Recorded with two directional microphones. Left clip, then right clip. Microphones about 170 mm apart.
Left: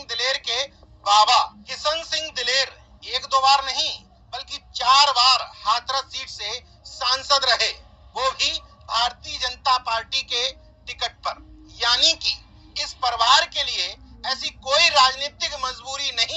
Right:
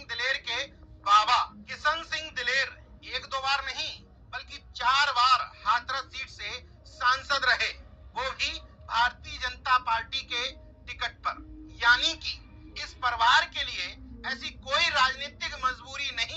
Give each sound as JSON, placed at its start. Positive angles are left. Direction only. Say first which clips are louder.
{"t": 0.0, "sound": "telephone", "louder": "left 6 dB", "side_deg": 45}